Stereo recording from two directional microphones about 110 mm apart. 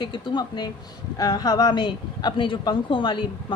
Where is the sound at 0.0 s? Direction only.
45° left (ahead or behind).